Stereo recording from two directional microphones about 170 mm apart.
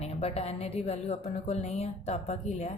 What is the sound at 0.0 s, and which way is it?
A woman's voice, 35° left (ahead or behind).